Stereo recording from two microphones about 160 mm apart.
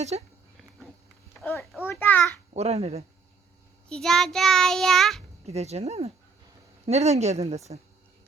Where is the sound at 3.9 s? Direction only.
5° left (ahead or behind).